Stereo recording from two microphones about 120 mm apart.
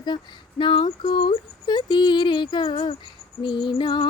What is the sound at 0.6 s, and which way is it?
Female singing, 40° left (ahead or behind).